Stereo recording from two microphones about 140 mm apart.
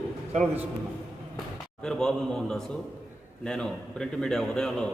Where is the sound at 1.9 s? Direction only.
5° left (ahead or behind).